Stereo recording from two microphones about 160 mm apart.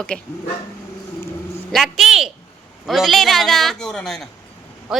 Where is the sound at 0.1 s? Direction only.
5° left (ahead or behind).